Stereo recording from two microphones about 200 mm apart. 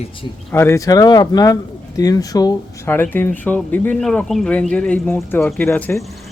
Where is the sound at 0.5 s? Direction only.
15° left (ahead or behind).